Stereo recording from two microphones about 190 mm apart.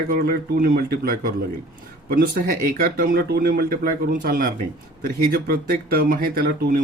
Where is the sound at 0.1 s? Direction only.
50° right (ahead or behind).